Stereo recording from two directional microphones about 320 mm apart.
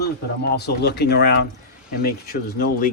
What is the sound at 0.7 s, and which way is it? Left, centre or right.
Speech, left.